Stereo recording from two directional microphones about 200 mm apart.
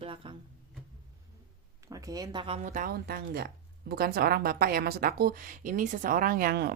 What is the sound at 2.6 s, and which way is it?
Speech, 40° right (ahead or behind).